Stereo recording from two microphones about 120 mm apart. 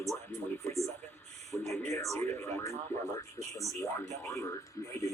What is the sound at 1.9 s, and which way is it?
Speech, 25° left (ahead or behind).